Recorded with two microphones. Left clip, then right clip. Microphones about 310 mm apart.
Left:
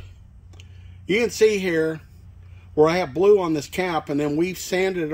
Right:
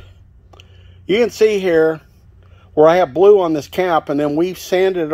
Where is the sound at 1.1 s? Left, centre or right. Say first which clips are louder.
Right 5 dB; centre.